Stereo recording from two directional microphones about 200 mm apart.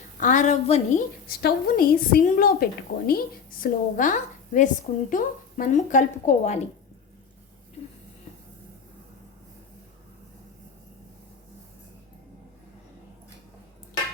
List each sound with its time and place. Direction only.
0.2 s a woman's voice: 40° left (ahead or behind)
1.4 s a woman's voice: 50° left (ahead or behind)